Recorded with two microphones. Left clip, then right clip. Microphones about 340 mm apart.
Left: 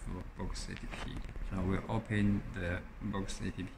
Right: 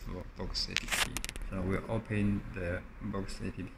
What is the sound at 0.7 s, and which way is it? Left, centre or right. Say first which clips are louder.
Speech: right 13 dB; right.